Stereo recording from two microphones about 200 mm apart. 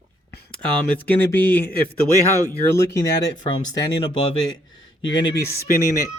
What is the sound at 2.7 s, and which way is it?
Speech, 15° left (ahead or behind).